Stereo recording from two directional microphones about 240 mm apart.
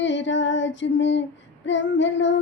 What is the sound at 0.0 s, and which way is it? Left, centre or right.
Female singing, left.